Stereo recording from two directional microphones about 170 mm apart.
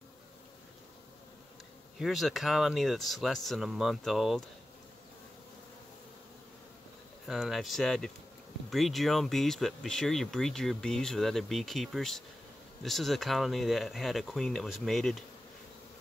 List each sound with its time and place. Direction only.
2.0 s speech: centre (ahead or behind)
7.2 s speech: centre (ahead or behind)